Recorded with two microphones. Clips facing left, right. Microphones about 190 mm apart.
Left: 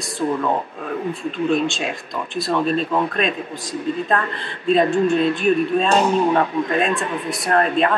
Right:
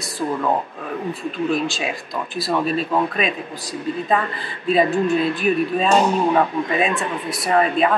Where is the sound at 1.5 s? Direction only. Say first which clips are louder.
Left 3 dB; centre (ahead or behind).